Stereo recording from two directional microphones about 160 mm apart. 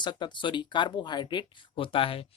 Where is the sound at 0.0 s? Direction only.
30° left (ahead or behind).